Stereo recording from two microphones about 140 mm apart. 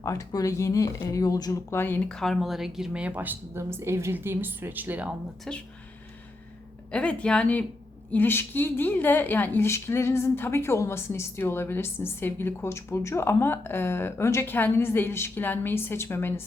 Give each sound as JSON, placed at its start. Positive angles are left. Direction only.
{"t": 0.0, "sound": "speech", "side_deg": 20}
{"t": 1.8, "sound": "speech", "side_deg": 10}
{"t": 5.5, "sound": "speech", "side_deg": 5}
{"t": 6.9, "sound": "a woman's voice", "side_deg": 10}